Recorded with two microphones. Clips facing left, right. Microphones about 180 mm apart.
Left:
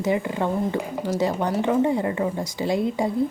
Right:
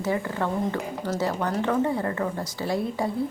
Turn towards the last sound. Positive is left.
turn(degrees=20)  # may be behind; listen again after turning